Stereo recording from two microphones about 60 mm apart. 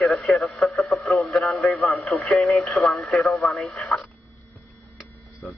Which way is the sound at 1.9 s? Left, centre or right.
Centre.